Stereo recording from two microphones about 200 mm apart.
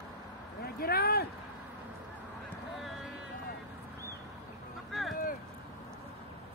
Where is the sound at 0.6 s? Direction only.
50° left (ahead or behind).